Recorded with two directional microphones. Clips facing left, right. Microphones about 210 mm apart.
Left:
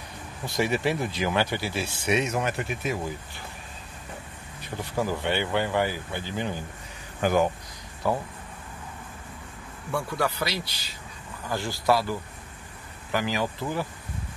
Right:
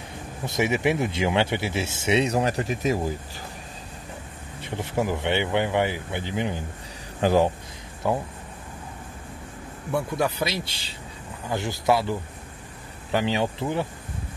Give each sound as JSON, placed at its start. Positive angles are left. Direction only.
{"t": 0.5, "sound": "speech", "side_deg": -20}
{"t": 4.6, "sound": "speech", "side_deg": -25}
{"t": 7.2, "sound": "speech", "side_deg": -30}
{"t": 9.8, "sound": "speech", "side_deg": -20}